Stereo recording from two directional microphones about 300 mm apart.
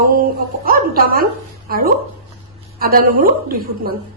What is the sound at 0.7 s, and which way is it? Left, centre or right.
A woman's voice, right.